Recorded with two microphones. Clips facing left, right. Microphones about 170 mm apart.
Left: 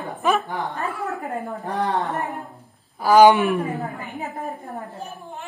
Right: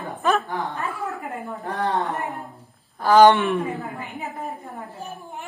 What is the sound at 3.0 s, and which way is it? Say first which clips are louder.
Speech: left 1 dB; 10° left (ahead or behind).